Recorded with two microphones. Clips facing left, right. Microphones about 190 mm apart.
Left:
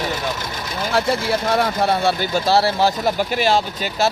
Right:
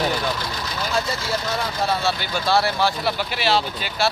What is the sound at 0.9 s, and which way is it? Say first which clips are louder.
Speech: left 7 dB; 60° left (ahead or behind).